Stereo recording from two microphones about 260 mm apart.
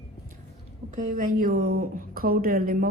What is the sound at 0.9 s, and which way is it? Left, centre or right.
A woman's voice, right.